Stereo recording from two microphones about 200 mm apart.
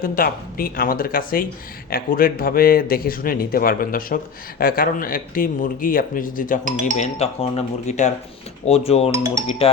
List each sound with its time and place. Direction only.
0.0 s a man's voice: 45° left (ahead or behind)
6.7 s speech: 40° right (ahead or behind)
6.9 s speech: 30° left (ahead or behind)
9.1 s speech: 15° right (ahead or behind)
9.5 s speech: 30° left (ahead or behind)